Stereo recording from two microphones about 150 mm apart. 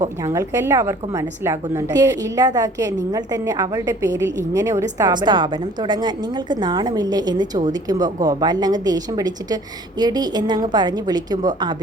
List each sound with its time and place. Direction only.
0.0 s a woman's voice: 20° right (ahead or behind)